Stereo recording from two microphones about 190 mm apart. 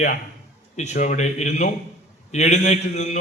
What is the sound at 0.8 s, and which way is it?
A man's voice, 35° left (ahead or behind).